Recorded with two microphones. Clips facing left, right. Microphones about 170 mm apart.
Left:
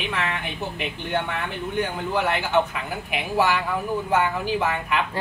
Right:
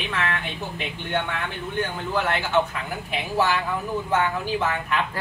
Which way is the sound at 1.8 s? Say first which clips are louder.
Left 1 dB; 15° left (ahead or behind).